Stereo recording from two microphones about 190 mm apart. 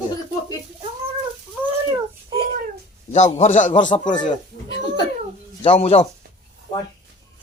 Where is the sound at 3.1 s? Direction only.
40° left (ahead or behind).